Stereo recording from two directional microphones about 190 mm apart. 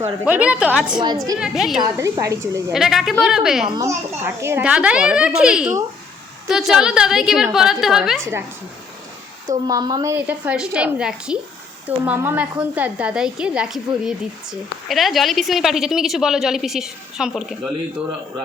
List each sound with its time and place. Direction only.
0.0 s a woman's voice: 10° right (ahead or behind)
0.9 s a woman's voice: 20° right (ahead or behind)
1.4 s speech: centre (ahead or behind)
2.0 s a woman's voice: 15° right (ahead or behind)
2.7 s speech: centre (ahead or behind)
3.7 s a woman's voice: 15° right (ahead or behind); by 8.3 s centre (ahead or behind)
9.5 s a woman's voice: 20° right (ahead or behind); by 17.6 s centre (ahead or behind)